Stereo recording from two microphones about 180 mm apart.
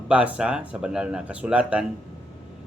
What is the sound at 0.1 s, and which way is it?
Speech, 5° right (ahead or behind).